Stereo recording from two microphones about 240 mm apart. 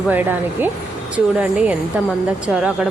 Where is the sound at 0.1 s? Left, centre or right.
Centre.